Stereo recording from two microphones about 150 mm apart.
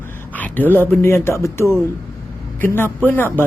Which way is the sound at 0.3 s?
10° left (ahead or behind).